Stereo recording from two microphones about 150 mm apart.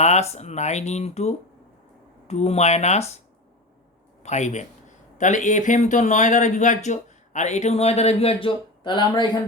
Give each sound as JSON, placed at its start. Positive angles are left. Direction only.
{"t": 0.0, "sound": "speech", "side_deg": 45}
{"t": 4.2, "sound": "speech", "side_deg": 50}